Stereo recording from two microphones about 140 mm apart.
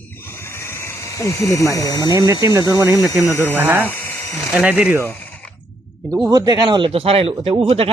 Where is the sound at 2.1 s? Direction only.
25° right (ahead or behind).